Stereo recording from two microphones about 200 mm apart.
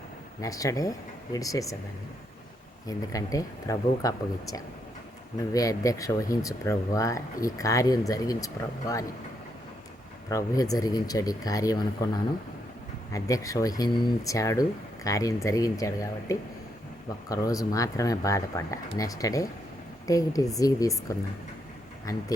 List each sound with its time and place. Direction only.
0.4 s speech: 15° left (ahead or behind)
2.8 s speech: 15° left (ahead or behind)
5.5 s speech: 15° left (ahead or behind)
10.2 s speech: 15° left (ahead or behind)
22.1 s speech: 15° left (ahead or behind)